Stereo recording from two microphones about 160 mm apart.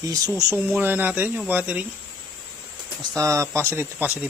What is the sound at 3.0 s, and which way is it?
Speech, 20° right (ahead or behind).